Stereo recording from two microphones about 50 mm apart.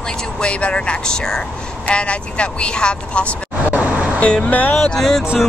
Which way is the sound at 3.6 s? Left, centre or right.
Right.